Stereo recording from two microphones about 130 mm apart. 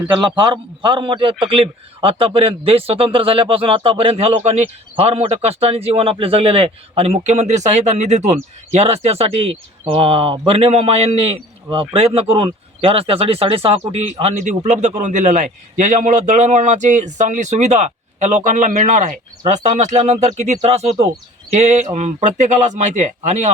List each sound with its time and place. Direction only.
0.2 s a man's voice: 35° right (ahead or behind); by 23.5 s 60° right (ahead or behind)